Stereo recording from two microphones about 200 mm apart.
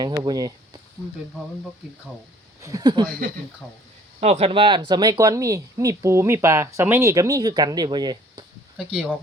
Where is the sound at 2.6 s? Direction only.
20° right (ahead or behind).